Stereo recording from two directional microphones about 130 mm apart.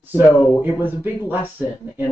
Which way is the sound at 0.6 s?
15° right (ahead or behind).